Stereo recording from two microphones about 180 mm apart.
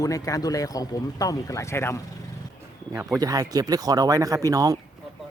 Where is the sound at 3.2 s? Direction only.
20° right (ahead or behind).